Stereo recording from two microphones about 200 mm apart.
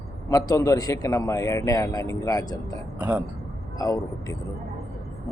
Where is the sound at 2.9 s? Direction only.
5° right (ahead or behind).